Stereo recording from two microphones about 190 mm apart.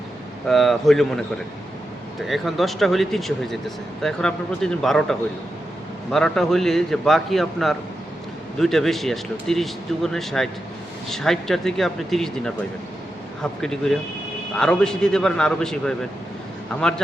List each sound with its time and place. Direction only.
0.4 s speech: centre (ahead or behind)
2.2 s speech: centre (ahead or behind)